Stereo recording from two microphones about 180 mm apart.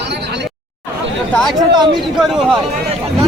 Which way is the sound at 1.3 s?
Centre (ahead or behind).